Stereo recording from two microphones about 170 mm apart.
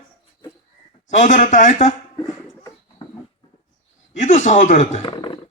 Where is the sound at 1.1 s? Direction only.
45° left (ahead or behind).